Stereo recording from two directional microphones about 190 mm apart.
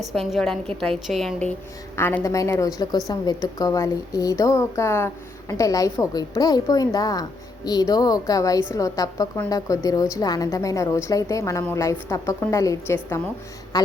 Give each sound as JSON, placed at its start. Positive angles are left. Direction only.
{"t": 0.1, "sound": "a woman's voice", "side_deg": 0}